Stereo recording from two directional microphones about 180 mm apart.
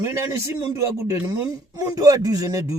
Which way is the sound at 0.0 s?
20° right (ahead or behind).